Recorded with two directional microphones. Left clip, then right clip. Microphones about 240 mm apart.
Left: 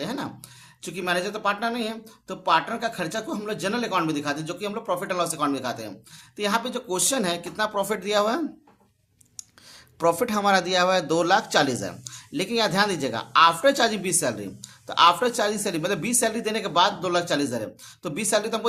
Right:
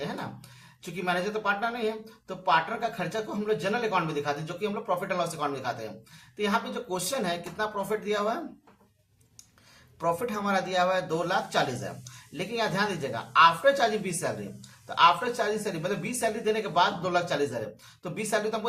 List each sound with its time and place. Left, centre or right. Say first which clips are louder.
0.0 s a sound: left 4 dB; left
0.8 s speech: left 3 dB; left
10.0 s speech: left 7 dB; left